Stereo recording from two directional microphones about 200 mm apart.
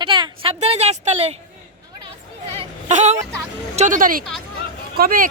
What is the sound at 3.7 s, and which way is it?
Speech, 40° right (ahead or behind).